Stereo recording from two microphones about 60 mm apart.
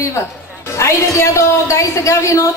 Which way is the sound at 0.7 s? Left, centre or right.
Left.